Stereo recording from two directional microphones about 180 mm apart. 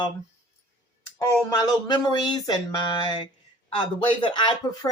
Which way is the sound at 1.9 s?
25° left (ahead or behind).